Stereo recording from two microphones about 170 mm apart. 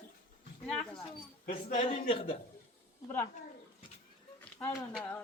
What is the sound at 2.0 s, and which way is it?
Speech, 35° left (ahead or behind).